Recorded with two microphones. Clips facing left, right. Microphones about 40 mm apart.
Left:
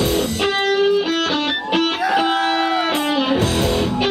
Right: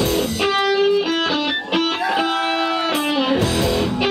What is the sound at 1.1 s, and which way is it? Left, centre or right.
Music, left.